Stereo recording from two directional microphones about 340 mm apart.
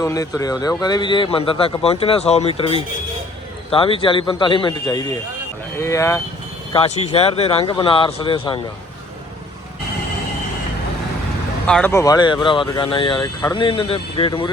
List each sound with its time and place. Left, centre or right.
0.0 s speech: centre
6.7 s speech: centre
11.6 s speech: centre